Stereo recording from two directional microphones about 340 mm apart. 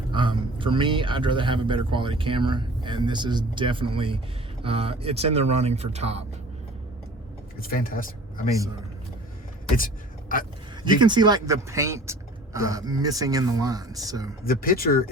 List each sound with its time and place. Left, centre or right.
0.1 s a man's voice: centre
7.6 s speech: left
8.4 s a man's voice: centre
9.7 s speech: left
11.0 s a man's voice: centre
14.4 s speech: left